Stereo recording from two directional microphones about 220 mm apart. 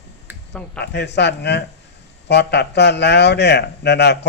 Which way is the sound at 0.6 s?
5° left (ahead or behind).